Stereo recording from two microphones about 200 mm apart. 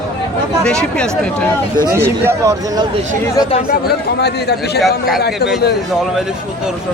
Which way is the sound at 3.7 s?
55° left (ahead or behind).